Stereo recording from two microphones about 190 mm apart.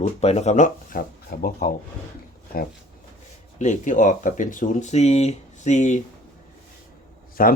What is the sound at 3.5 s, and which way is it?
Speech, 40° left (ahead or behind).